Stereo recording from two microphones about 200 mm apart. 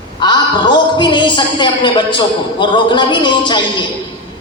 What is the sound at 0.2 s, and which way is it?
A man's voice, 20° left (ahead or behind).